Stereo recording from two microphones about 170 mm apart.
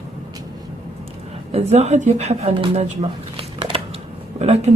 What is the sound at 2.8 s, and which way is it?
Shuffling cards, 40° right (ahead or behind).